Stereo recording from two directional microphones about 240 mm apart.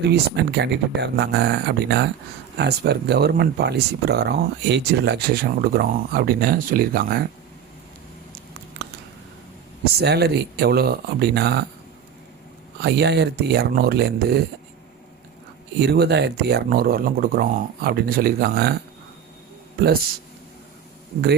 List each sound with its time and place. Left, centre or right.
0.0 s speech: right
9.8 s speech: right
12.8 s speech: right
15.8 s speech: right